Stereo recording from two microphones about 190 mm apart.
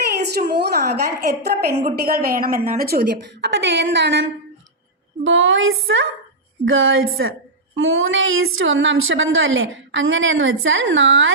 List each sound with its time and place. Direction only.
0.0 s a sound: 55° right (ahead or behind)
1.8 s a woman's voice: 55° right (ahead or behind); by 4.2 s 70° right (ahead or behind)
5.2 s a woman's voice: 90° right